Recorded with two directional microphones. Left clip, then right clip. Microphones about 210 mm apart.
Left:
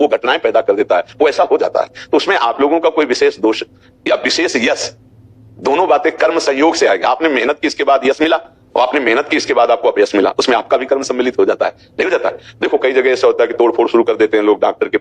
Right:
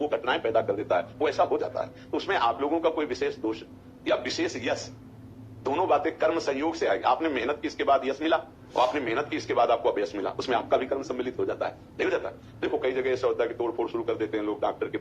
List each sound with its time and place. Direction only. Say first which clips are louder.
0.0 s a man's voice: left 14 dB; 40° left (ahead or behind)